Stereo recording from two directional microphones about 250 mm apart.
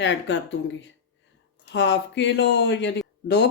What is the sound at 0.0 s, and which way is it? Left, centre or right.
Speech, left.